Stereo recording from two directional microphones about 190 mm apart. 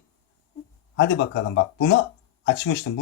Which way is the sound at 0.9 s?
65° left (ahead or behind).